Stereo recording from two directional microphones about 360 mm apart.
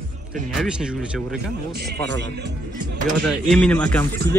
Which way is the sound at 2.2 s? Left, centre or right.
Right.